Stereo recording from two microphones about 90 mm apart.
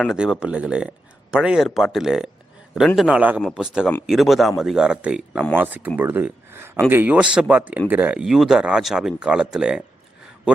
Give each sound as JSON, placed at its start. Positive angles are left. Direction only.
{"t": 0.1, "sound": "speech", "side_deg": -10}
{"t": 3.1, "sound": "speech", "side_deg": -15}
{"t": 8.2, "sound": "speech", "side_deg": -5}